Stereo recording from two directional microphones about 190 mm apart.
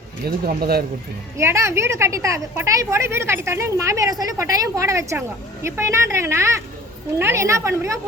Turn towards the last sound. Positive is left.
turn(degrees=-15)  # may be behind; listen again after turning